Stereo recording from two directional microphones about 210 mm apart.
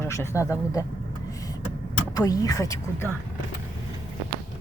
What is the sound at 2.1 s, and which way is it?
Speech, 15° left (ahead or behind).